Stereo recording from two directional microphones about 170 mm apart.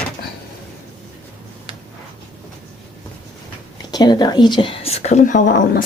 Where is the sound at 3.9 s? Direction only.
25° left (ahead or behind); by 5.6 s 50° left (ahead or behind).